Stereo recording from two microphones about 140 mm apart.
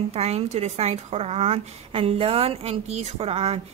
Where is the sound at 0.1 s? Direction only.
50° right (ahead or behind).